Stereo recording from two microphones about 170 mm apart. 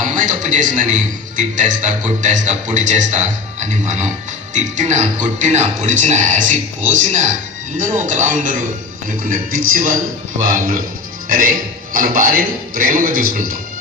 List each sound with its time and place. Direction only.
0.0 s a man's voice: 50° right (ahead or behind)
11.3 s a man's voice: 55° right (ahead or behind)